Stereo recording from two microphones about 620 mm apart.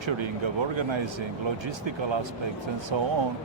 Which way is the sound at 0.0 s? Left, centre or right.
Right.